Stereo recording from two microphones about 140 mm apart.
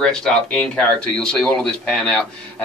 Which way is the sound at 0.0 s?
5° left (ahead or behind).